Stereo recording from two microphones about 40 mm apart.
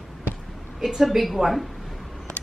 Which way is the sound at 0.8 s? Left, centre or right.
Centre.